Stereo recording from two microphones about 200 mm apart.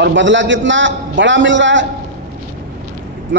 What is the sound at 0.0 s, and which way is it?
A man's voice, 65° right (ahead or behind).